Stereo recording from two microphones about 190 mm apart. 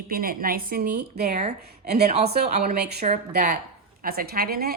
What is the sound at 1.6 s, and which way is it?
Speech, 55° right (ahead or behind).